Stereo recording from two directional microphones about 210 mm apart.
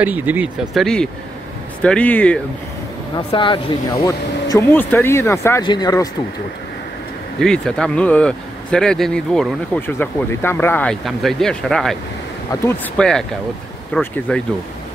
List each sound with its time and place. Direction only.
0.0 s speech: 10° right (ahead or behind)
3.2 s speech: 25° left (ahead or behind)
7.3 s speech: 5° left (ahead or behind)